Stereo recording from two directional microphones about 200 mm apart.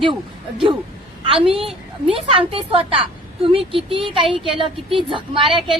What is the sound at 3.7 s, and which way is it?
Speech, 30° right (ahead or behind).